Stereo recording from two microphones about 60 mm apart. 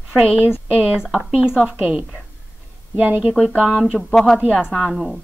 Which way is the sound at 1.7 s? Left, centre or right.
Right.